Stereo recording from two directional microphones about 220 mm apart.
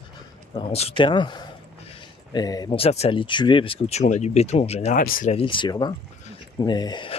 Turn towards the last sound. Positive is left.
turn(degrees=20)  # may be behind; listen again after turning